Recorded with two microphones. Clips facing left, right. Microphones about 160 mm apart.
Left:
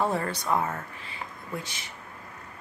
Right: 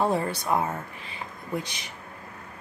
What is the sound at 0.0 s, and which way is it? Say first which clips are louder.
Speech: right 2 dB; 15° right (ahead or behind).